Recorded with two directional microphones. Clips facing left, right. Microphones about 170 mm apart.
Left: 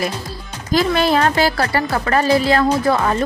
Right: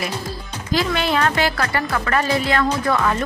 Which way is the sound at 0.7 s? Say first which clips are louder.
Left 4 dB; 40° left (ahead or behind).